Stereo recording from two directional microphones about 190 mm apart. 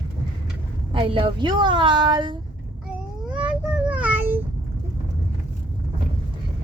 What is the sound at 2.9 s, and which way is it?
Child singing, 5° right (ahead or behind).